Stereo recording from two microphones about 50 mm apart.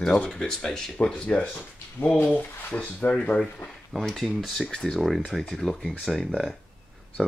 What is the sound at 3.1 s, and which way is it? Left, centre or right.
Speech, centre.